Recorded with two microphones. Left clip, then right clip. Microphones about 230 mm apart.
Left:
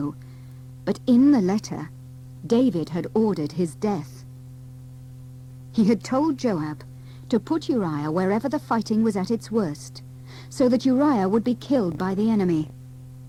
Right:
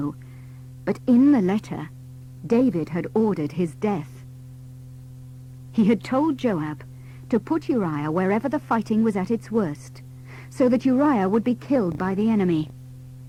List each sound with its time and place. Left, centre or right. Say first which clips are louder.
0.9 s speech: even; left
2.7 s speech: even; left
5.7 s speech: right 1 dB; left
7.3 s speech: even; left
12.2 s speech: even; left